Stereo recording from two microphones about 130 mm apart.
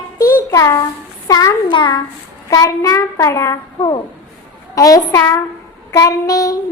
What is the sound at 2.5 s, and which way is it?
A child's voice, 25° left (ahead or behind).